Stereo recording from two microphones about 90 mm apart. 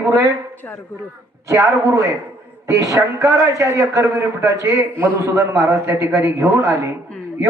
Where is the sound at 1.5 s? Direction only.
35° right (ahead or behind).